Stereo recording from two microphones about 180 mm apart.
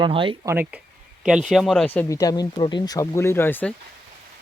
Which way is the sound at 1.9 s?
20° left (ahead or behind).